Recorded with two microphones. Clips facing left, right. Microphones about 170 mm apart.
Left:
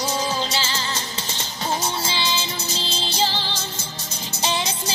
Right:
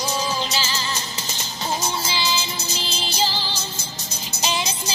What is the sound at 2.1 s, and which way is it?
Music, 25° left (ahead or behind).